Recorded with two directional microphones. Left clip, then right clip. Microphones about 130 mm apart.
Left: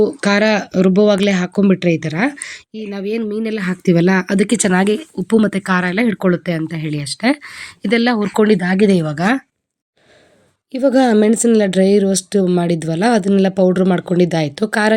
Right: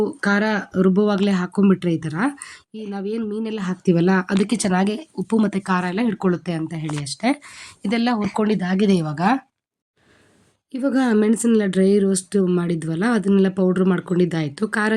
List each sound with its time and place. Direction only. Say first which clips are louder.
0.0 s speech: left 6 dB; 30° left (ahead or behind)
10.7 s speech: left 8 dB; 25° left (ahead or behind)